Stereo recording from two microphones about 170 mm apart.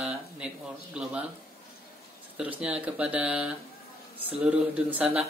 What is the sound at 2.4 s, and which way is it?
A man's voice, 5° right (ahead or behind).